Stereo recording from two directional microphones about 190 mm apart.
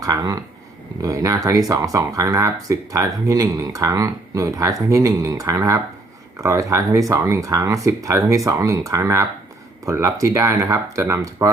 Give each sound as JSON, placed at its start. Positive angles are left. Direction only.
{"t": 0.0, "sound": "speech", "side_deg": -20}